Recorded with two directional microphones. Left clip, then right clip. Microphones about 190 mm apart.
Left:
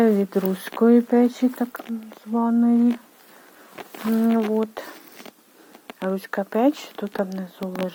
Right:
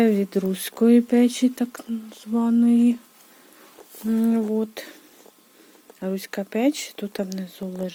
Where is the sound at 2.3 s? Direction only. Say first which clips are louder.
Even; 35° right (ahead or behind).